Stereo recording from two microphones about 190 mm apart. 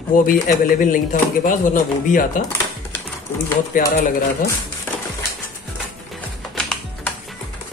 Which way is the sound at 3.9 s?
45° left (ahead or behind).